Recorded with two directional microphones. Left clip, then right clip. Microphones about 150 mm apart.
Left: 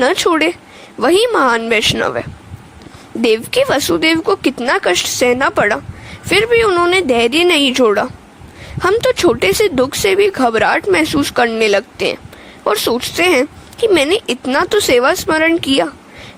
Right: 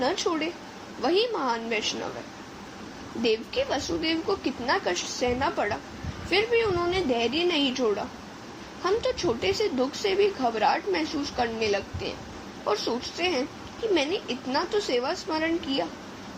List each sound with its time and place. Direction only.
0.0 s speech: 90° left
3.2 s speech: 90° left